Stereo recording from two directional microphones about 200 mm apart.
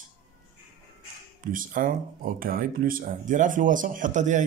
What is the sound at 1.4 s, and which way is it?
Speech, 45° right (ahead or behind).